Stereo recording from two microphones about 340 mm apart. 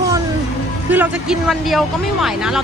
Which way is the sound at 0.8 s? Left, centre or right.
Centre.